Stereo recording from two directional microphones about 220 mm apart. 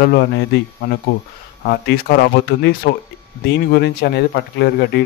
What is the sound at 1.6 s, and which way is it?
Speech, 45° left (ahead or behind).